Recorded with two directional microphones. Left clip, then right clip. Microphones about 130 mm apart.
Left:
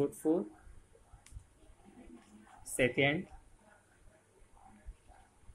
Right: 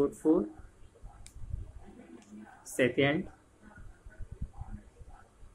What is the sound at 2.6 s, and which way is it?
Speech, 15° left (ahead or behind).